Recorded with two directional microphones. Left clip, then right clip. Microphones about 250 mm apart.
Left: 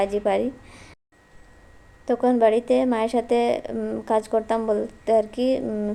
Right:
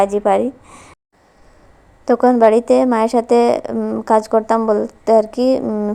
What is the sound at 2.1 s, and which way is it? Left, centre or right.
A woman's voice, right.